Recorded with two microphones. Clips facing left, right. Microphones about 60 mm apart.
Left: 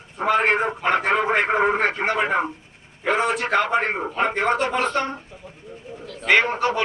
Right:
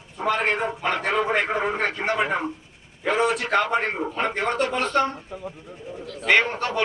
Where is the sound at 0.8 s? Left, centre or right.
Centre; by 2.1 s left.